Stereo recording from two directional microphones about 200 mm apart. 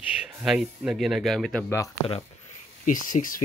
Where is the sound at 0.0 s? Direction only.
5° right (ahead or behind); by 1.9 s 10° left (ahead or behind).